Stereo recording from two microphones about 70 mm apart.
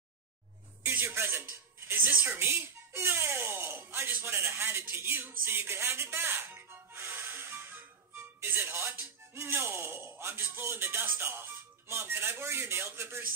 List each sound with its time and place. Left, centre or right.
0.8 s music: right
2.3 s speech: right